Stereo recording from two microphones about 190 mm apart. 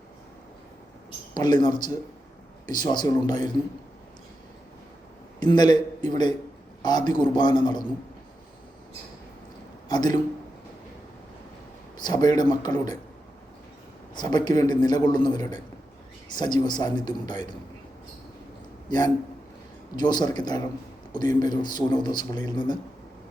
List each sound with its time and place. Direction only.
1.3 s a man's voice: 20° left (ahead or behind)
5.4 s a man's voice: 20° left (ahead or behind)
9.9 s a man's voice: 20° left (ahead or behind)
11.9 s a man's voice: 20° left (ahead or behind)
14.2 s a man's voice: 20° left (ahead or behind)
18.9 s a man's voice: 20° left (ahead or behind)